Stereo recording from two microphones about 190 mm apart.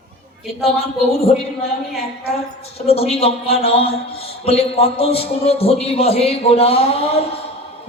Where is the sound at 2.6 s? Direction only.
30° left (ahead or behind).